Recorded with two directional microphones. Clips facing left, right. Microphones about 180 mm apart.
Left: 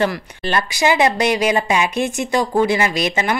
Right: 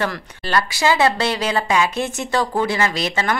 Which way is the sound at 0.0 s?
20° left (ahead or behind).